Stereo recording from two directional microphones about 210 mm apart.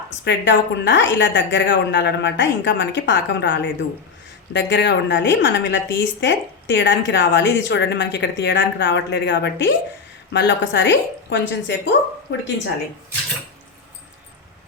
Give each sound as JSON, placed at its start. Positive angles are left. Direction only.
{"t": 0.3, "sound": "a woman's voice", "side_deg": 60}